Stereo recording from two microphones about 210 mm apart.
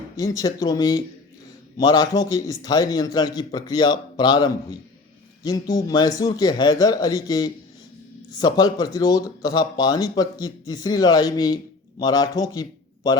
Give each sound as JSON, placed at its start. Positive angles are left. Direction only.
{"t": 0.2, "sound": "a man's voice", "side_deg": 15}